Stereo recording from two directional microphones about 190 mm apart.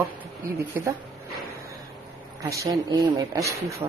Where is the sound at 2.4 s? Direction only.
15° right (ahead or behind).